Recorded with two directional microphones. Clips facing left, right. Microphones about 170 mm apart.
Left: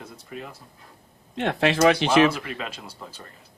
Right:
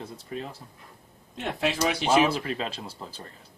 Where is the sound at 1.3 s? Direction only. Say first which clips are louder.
Left 6 dB; 70° left (ahead or behind).